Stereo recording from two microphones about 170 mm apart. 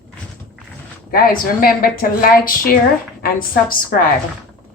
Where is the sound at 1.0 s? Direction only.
60° left (ahead or behind).